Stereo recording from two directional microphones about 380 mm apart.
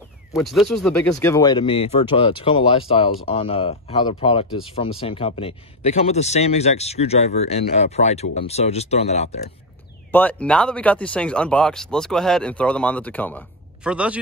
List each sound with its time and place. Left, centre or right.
0.3 s speech: centre
10.1 s speech: centre